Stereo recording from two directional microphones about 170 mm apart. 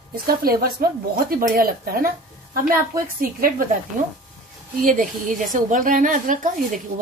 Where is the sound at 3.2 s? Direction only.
55° right (ahead or behind).